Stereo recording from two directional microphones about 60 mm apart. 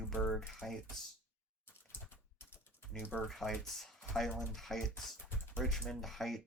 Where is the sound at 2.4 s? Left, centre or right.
Left.